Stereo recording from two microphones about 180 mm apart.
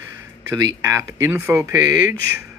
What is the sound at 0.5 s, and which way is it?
Speech, 20° right (ahead or behind).